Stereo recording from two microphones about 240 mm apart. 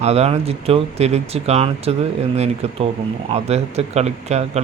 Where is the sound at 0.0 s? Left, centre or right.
Right.